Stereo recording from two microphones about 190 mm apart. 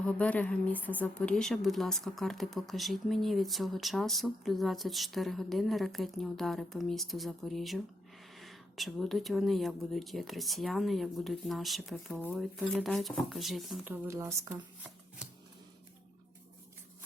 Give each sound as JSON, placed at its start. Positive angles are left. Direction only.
{"t": 0.0, "sound": "speech", "side_deg": 5}